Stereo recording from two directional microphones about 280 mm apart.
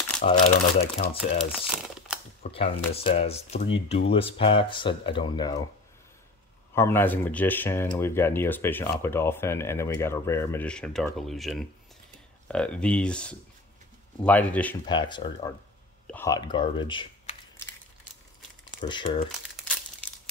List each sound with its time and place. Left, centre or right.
0.2 s speech: left
2.4 s speech: left
6.7 s speech: centre
14.9 s speech: centre
18.9 s speech: centre